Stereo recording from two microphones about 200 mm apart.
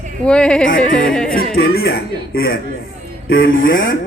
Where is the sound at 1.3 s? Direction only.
50° left (ahead or behind).